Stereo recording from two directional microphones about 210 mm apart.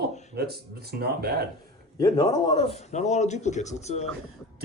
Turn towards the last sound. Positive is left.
turn(degrees=30)  # may be behind; listen again after turning